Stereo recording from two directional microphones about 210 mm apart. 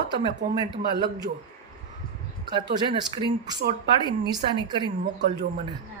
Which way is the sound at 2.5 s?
20° right (ahead or behind).